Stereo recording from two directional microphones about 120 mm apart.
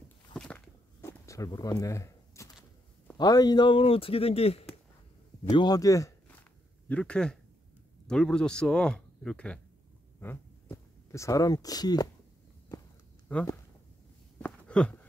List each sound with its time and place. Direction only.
0.3 s walk: 10° left (ahead or behind)
1.0 s a sound: 25° left (ahead or behind)
3.2 s speech: 35° left (ahead or behind); by 4.6 s 55° left (ahead or behind)
5.5 s speech: 30° left (ahead or behind)
6.9 s speech: 10° left (ahead or behind)
10.2 s speech: 20° left (ahead or behind)
14.4 s a sound: 10° left (ahead or behind)